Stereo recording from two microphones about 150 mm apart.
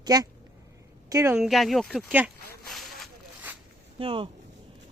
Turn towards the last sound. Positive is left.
turn(degrees=-35)  # may be behind; listen again after turning